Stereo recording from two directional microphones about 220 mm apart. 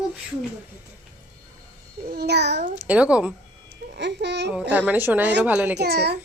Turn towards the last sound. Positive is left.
turn(degrees=-45)  # may be behind; listen again after turning